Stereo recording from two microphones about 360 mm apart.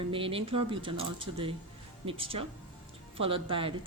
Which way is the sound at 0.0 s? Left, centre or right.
Centre.